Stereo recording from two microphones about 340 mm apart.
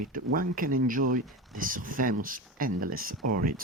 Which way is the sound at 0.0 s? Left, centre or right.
Right.